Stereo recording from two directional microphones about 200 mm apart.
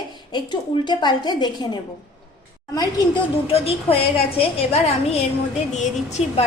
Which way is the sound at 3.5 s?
30° left (ahead or behind).